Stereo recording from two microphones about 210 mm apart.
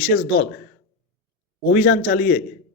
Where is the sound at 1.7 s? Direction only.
50° left (ahead or behind).